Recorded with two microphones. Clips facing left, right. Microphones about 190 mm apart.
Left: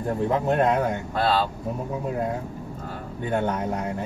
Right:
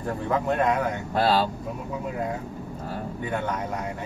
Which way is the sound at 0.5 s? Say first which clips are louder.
Left 2 dB; 25° left (ahead or behind).